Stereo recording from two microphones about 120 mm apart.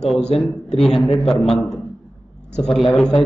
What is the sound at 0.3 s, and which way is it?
Speech, 5° left (ahead or behind).